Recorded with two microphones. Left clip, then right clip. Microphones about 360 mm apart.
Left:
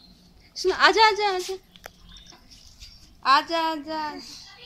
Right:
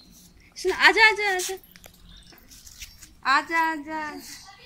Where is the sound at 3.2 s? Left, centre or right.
Centre.